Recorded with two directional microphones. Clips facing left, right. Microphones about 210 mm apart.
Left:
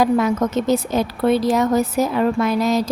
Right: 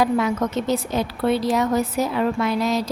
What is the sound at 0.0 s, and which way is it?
A woman's voice, 45° left (ahead or behind).